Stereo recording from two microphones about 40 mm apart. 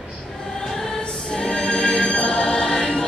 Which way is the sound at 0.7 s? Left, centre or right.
Centre.